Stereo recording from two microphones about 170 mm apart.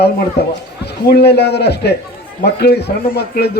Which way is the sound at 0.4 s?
75° left (ahead or behind).